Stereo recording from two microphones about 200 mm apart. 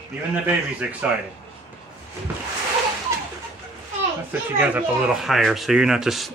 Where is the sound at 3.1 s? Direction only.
15° right (ahead or behind).